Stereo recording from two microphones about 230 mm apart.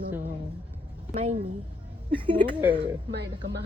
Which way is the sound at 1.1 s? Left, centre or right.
Right.